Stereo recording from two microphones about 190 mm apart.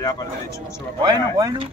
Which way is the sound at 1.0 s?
20° right (ahead or behind).